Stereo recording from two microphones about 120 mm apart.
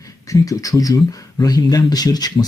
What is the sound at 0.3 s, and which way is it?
Speech, 30° left (ahead or behind).